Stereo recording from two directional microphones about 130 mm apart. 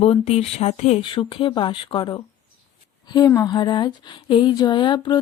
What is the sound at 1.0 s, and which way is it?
Speech, 40° left (ahead or behind).